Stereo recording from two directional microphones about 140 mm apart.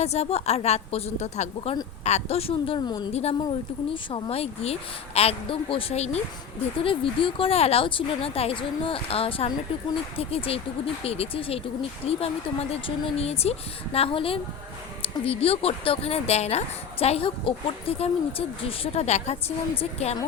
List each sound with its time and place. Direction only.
0.0 s speech: 50° left (ahead or behind); by 3.1 s 30° left (ahead or behind)
3.1 s speech: 50° left (ahead or behind)